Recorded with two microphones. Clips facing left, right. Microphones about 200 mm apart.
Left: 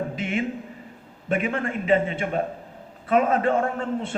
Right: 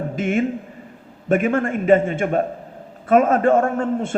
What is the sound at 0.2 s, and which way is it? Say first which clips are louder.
A man's voice: right 6 dB; 45° right (ahead or behind).